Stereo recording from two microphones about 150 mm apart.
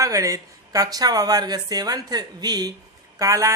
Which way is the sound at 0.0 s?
20° right (ahead or behind).